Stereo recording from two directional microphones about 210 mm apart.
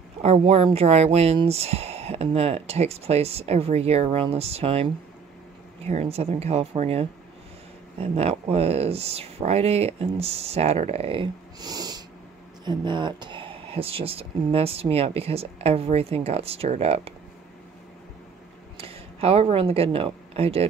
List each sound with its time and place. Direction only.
0.2 s speech: 30° right (ahead or behind)
5.9 s speech: 30° right (ahead or behind)
18.8 s speech: 25° right (ahead or behind)